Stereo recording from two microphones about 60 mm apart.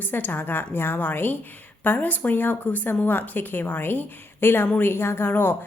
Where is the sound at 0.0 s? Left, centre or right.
Left.